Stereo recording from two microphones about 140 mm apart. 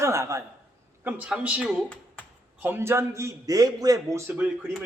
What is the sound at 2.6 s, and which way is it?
A man's voice, 15° right (ahead or behind).